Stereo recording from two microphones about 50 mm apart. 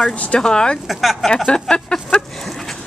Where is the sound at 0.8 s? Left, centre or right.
Centre.